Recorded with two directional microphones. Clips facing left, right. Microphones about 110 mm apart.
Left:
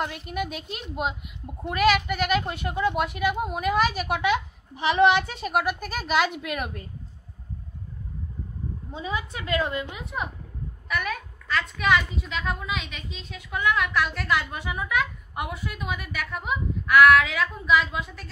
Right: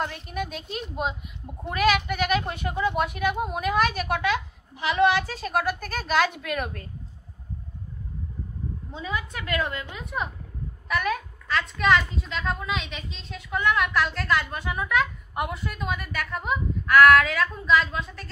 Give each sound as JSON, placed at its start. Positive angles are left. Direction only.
{"t": 0.0, "sound": "a woman's voice", "side_deg": 5}
{"t": 4.2, "sound": "a woman's voice", "side_deg": 20}
{"t": 9.0, "sound": "a woman's voice", "side_deg": 25}
{"t": 10.9, "sound": "a woman's voice", "side_deg": 0}